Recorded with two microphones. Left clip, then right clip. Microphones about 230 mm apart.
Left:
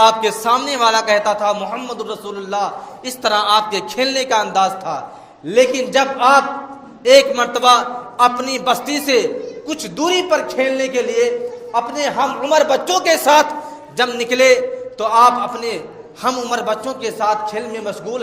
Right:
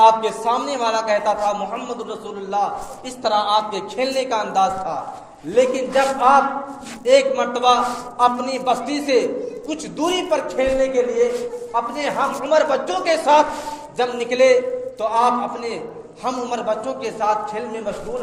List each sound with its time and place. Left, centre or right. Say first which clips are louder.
0.0 s a man's voice: left 1 dB; left